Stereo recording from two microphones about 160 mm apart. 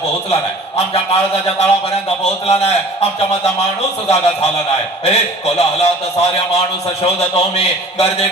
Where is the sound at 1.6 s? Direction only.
40° left (ahead or behind).